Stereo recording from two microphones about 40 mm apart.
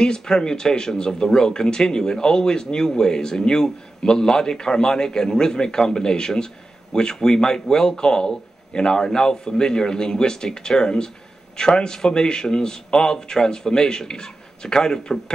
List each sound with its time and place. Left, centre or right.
0.0 s speech: centre